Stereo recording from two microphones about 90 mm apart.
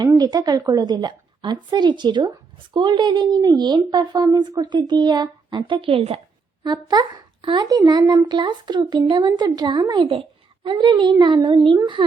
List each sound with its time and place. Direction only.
0.0 s a woman's voice: 45° right (ahead or behind); by 6.1 s 85° right
6.6 s a woman's voice: 50° right (ahead or behind)
10.1 s a child's voice: 85° right